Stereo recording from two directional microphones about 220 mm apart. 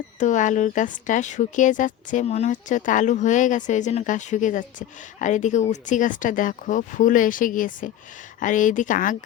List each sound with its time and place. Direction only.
0.2 s speech: 35° left (ahead or behind)